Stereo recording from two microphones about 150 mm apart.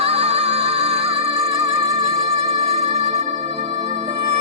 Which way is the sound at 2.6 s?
45° right (ahead or behind).